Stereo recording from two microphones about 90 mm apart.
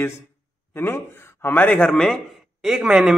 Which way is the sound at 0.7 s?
25° left (ahead or behind).